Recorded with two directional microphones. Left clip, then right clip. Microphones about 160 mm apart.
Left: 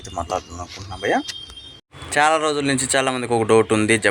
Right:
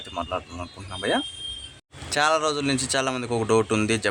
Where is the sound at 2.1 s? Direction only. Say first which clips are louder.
Left 4 dB; 10° left (ahead or behind).